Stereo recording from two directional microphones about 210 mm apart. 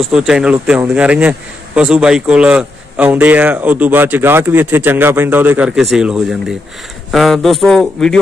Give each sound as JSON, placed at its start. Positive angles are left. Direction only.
{"t": 0.0, "sound": "a man's voice", "side_deg": 0}